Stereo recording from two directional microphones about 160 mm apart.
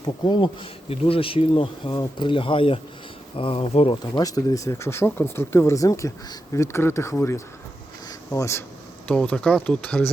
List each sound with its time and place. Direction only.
0.0 s speech: 25° left (ahead or behind)
4.2 s speech: 20° left (ahead or behind)